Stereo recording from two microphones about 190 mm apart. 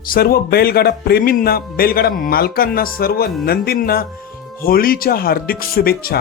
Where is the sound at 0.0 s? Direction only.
50° left (ahead or behind).